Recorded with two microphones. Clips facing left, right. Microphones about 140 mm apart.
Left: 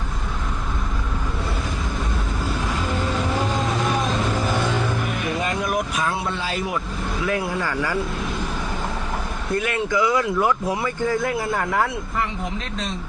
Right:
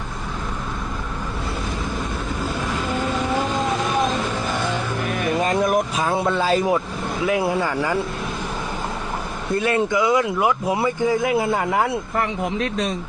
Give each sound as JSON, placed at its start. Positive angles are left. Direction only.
{"t": 5.4, "sound": "a sound", "side_deg": -45}
{"t": 6.0, "sound": "speech", "side_deg": -40}
{"t": 7.6, "sound": "speech", "side_deg": -20}
{"t": 9.6, "sound": "speech", "side_deg": -30}
{"t": 12.1, "sound": "speech", "side_deg": -60}